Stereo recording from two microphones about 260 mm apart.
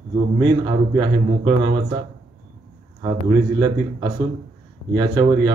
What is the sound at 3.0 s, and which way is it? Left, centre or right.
Speech, centre.